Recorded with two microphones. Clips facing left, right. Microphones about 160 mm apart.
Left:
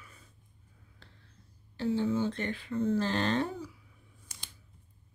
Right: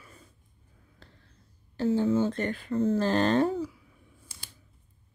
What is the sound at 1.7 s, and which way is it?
Speech, 45° right (ahead or behind).